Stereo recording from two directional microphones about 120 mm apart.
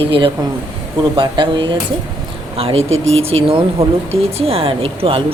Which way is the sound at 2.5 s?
55° right (ahead or behind).